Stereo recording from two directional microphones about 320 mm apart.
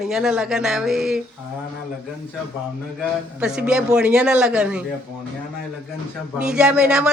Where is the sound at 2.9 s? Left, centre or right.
Centre.